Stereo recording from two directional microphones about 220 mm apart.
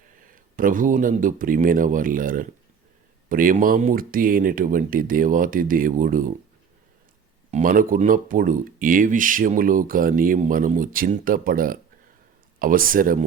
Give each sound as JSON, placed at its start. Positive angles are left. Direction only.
{"t": 0.5, "sound": "speech", "side_deg": -35}
{"t": 7.5, "sound": "speech", "side_deg": -40}